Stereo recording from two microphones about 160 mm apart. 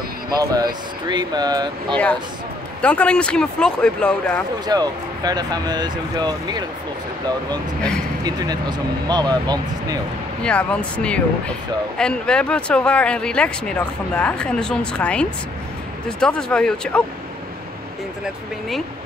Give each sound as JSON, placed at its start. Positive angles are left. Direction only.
{"t": 0.3, "sound": "speech", "side_deg": -25}
{"t": 2.8, "sound": "speech", "side_deg": 5}
{"t": 4.6, "sound": "speech", "side_deg": -25}
{"t": 10.4, "sound": "speech", "side_deg": 5}